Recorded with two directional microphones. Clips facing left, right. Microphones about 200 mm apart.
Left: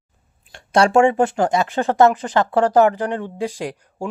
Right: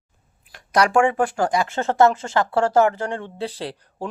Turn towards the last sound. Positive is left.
turn(degrees=15)  # may be behind; listen again after turning